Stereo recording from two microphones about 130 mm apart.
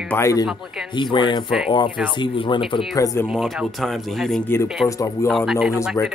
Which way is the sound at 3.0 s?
25° left (ahead or behind).